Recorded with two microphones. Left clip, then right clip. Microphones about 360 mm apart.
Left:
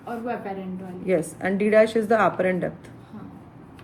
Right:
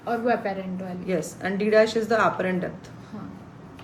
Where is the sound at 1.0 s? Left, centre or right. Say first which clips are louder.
Left 4 dB; centre.